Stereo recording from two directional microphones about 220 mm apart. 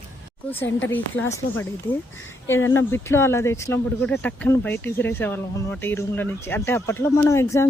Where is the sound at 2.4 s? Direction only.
60° left (ahead or behind).